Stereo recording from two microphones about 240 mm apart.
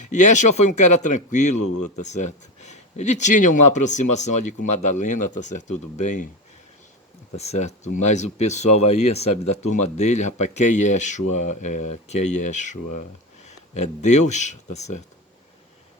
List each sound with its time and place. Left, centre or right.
0.1 s speech: left
7.3 s speech: left